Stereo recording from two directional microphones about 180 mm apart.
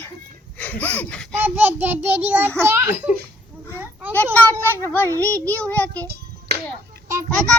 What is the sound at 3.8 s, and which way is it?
Children playing, 10° right (ahead or behind).